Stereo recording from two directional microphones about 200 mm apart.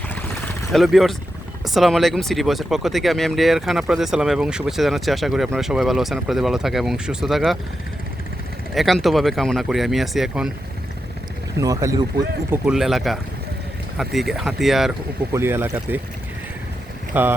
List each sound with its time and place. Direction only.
0.1 s vehicle: 10° left (ahead or behind)
1.6 s speech: centre (ahead or behind)
8.7 s speech: centre (ahead or behind)
11.6 s speech: 15° right (ahead or behind)
12.5 s speech: 5° right (ahead or behind)
15.3 s speech: 10° right (ahead or behind)
17.1 s speech: 10° right (ahead or behind)